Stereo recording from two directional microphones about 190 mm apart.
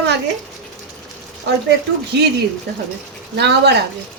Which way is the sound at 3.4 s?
60° right (ahead or behind).